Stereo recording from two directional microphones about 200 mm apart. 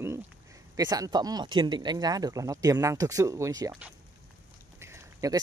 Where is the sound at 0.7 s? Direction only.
15° right (ahead or behind).